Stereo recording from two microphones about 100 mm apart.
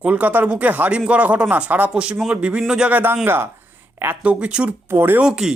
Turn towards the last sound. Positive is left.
turn(degrees=-5)  # may be behind; listen again after turning